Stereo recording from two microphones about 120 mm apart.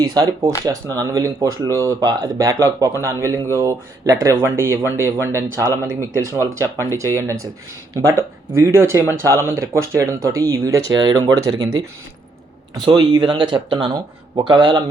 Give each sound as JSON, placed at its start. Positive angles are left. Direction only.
{"t": 0.0, "sound": "speech", "side_deg": -35}
{"t": 12.7, "sound": "speech", "side_deg": -40}